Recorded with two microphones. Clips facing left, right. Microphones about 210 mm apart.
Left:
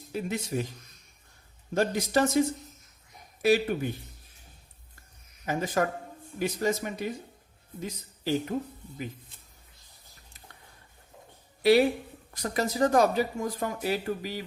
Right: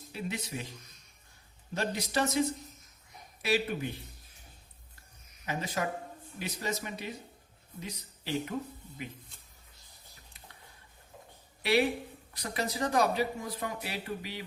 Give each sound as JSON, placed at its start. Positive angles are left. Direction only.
{"t": 0.1, "sound": "speech", "side_deg": 45}
{"t": 1.7, "sound": "speech", "side_deg": 50}
{"t": 5.5, "sound": "speech", "side_deg": 50}
{"t": 12.4, "sound": "speech", "side_deg": 45}